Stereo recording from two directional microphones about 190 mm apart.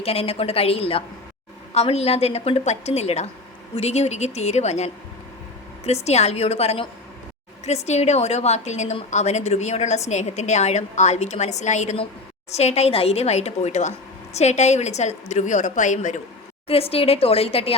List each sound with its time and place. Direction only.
0.0 s a woman's voice: 30° left (ahead or behind)